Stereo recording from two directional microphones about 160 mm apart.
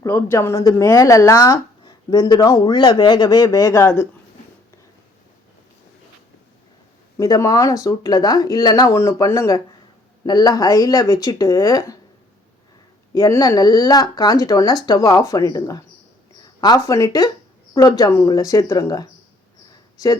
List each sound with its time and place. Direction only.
0.0 s speech: 15° left (ahead or behind)
7.2 s speech: 20° left (ahead or behind)
13.1 s speech: 20° left (ahead or behind)